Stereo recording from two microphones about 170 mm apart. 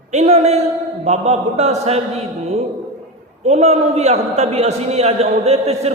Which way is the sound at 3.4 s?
40° right (ahead or behind).